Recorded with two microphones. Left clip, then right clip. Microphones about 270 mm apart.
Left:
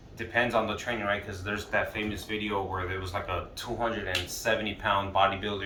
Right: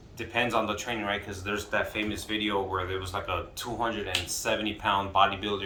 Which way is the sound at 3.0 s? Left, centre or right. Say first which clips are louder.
Right 1 dB; centre.